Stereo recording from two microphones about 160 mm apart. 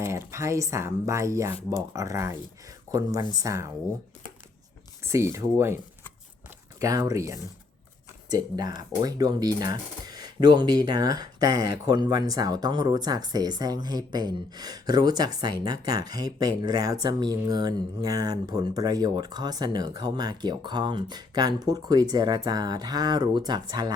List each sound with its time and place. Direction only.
0.0 s speech: 15° right (ahead or behind)
5.1 s speech: 15° right (ahead or behind)